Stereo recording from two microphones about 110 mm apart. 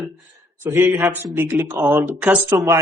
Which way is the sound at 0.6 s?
20° right (ahead or behind).